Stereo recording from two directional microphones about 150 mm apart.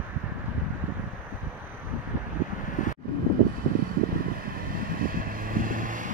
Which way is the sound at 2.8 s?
60° left (ahead or behind).